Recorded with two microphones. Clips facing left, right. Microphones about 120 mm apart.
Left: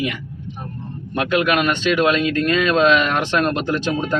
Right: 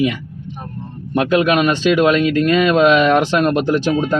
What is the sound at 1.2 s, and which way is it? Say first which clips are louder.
Speech: right 4 dB; 30° right (ahead or behind).